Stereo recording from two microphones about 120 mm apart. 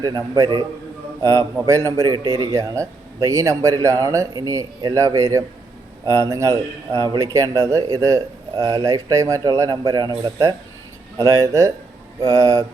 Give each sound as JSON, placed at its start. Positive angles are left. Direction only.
{"t": 0.0, "sound": "a man's voice", "side_deg": -30}